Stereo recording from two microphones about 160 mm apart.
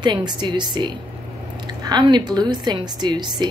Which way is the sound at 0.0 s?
25° right (ahead or behind).